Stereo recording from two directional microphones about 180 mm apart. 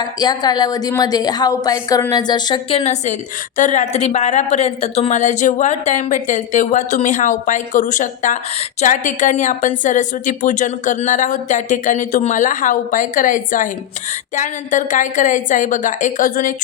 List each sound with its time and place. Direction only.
0.0 s a woman's voice: 20° left (ahead or behind); by 16.6 s 50° left (ahead or behind)